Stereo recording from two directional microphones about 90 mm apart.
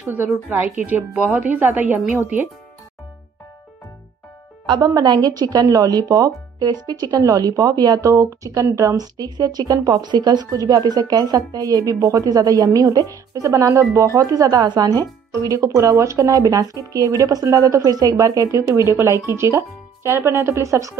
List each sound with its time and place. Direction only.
0.0 s a woman's voice: 25° right (ahead or behind)
4.6 s a woman's voice: 50° right (ahead or behind)